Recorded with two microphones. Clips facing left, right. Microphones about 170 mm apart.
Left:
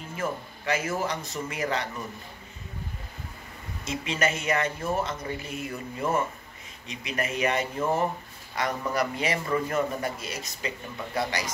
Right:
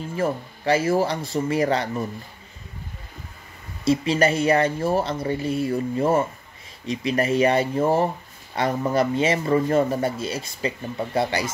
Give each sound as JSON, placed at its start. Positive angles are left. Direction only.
{"t": 0.1, "sound": "speech", "side_deg": -30}
{"t": 3.8, "sound": "a man's voice", "side_deg": -35}